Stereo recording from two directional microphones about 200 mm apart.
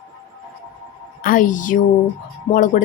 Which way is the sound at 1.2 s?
40° left (ahead or behind).